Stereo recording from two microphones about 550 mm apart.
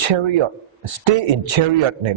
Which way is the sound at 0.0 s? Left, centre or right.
Right.